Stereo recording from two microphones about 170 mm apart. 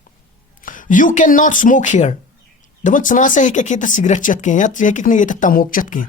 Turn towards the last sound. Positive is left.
turn(degrees=50)  # may be behind; listen again after turning